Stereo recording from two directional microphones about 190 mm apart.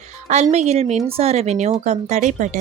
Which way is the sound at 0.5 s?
35° right (ahead or behind).